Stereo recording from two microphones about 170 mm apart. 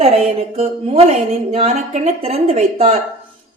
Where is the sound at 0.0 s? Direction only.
40° right (ahead or behind).